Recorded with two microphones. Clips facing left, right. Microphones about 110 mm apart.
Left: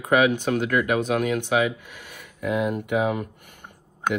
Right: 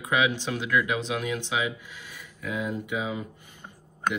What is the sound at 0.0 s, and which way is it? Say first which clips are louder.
Speech: left 6 dB; 55° left (ahead or behind).